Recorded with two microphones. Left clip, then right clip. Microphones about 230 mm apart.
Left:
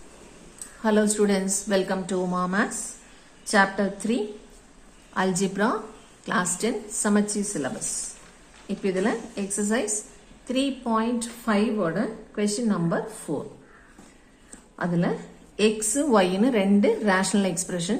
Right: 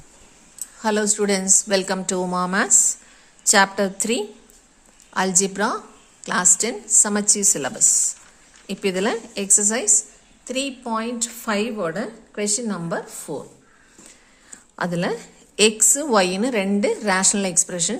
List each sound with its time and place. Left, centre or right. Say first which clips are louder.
0.8 s a woman's voice: right 1 dB; right
14.8 s a woman's voice: right 3 dB; right